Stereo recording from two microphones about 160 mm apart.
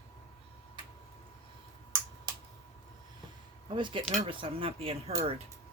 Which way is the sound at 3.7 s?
30° right (ahead or behind).